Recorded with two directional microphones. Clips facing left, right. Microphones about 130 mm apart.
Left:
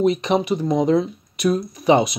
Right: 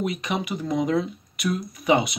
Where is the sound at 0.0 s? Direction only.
30° left (ahead or behind).